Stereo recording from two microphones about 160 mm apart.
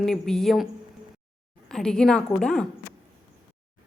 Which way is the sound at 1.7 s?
5° left (ahead or behind).